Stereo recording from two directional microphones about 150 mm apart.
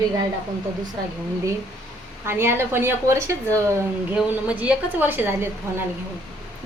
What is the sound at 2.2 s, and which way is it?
A woman's voice, 15° right (ahead or behind).